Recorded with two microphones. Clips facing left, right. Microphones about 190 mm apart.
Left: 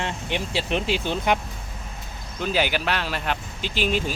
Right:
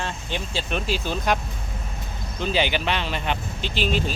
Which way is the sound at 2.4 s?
5° left (ahead or behind).